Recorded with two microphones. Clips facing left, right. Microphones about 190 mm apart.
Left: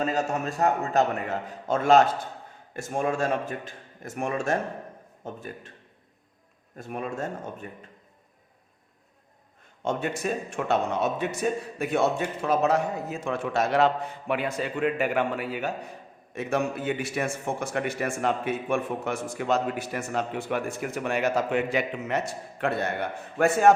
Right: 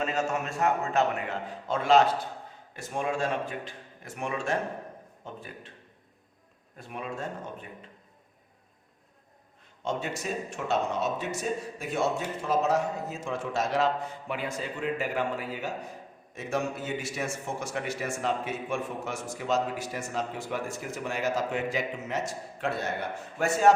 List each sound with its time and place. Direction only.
0.0 s a man's voice: 35° left (ahead or behind)
6.7 s a man's voice: 45° left (ahead or behind)
9.8 s a man's voice: 55° left (ahead or behind)